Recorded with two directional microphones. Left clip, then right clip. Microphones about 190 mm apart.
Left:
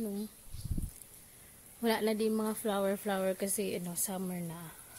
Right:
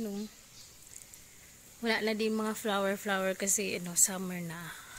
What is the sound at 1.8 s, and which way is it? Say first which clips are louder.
A woman's voice: even; 15° left (ahead or behind).